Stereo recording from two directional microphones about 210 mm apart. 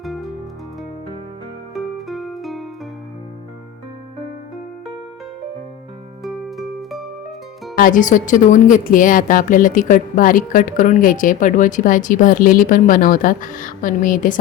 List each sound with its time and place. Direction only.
0.0 s music: centre (ahead or behind)
1.7 s music: centre (ahead or behind)
6.2 s music: centre (ahead or behind)
7.8 s a woman's voice: 40° left (ahead or behind)